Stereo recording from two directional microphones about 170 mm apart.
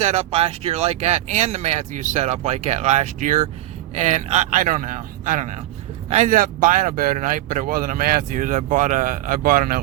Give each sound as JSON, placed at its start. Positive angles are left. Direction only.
{"t": 0.0, "sound": "speech", "side_deg": -40}